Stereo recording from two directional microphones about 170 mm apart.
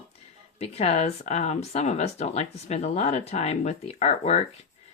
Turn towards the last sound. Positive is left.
turn(degrees=40)  # may be behind; listen again after turning